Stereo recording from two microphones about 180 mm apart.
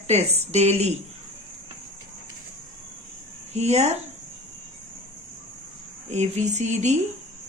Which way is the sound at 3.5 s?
35° right (ahead or behind).